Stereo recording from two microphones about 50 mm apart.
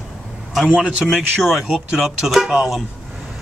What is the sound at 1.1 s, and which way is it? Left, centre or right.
Speech, centre.